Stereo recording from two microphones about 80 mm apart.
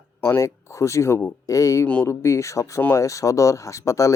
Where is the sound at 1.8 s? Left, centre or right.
Centre.